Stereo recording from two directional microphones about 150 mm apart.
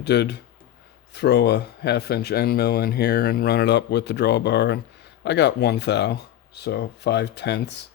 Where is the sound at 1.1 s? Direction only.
90° left.